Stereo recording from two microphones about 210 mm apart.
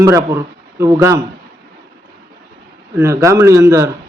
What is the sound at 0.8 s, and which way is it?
Speech, 15° right (ahead or behind).